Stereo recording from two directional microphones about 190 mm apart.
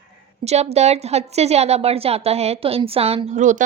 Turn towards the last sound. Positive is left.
turn(degrees=-40)  # may be behind; listen again after turning